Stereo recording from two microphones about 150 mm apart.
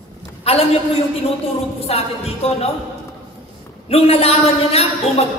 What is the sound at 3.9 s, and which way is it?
A woman's voice, 40° left (ahead or behind).